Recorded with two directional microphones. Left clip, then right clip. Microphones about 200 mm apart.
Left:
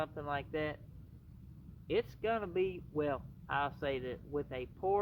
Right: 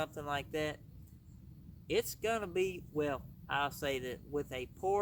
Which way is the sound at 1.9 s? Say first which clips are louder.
Even; 15° right (ahead or behind).